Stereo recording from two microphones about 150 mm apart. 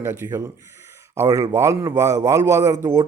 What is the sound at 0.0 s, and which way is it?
A man's voice, 15° right (ahead or behind).